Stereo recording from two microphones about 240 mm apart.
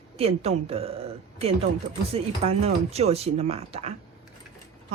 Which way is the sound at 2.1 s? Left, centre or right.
Right.